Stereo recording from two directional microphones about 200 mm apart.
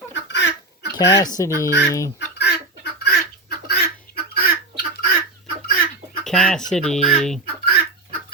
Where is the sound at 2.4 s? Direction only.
55° left (ahead or behind).